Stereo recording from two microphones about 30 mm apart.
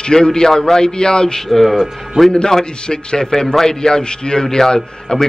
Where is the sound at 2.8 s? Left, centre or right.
Left.